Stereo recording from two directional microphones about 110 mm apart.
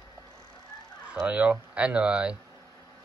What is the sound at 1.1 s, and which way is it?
Speech, 10° right (ahead or behind).